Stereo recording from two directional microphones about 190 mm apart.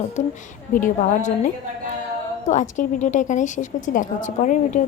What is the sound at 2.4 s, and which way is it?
A woman's voice, 40° left (ahead or behind).